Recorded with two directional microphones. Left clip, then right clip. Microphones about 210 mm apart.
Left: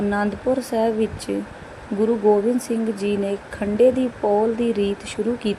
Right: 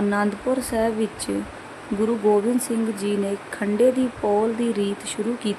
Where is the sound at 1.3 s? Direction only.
30° right (ahead or behind).